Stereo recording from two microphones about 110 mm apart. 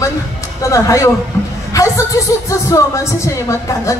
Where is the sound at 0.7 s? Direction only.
30° left (ahead or behind).